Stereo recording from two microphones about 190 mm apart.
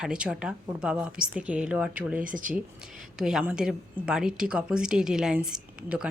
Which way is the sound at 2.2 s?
45° right (ahead or behind).